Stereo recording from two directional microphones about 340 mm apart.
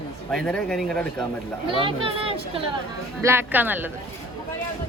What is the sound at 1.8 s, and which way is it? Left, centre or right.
A woman's voice, centre.